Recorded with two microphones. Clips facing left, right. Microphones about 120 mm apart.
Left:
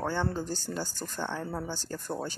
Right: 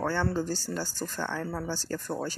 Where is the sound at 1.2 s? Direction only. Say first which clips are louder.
Even; 20° left (ahead or behind).